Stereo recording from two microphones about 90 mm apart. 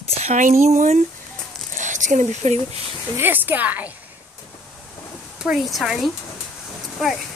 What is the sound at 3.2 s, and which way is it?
Speech, 20° right (ahead or behind).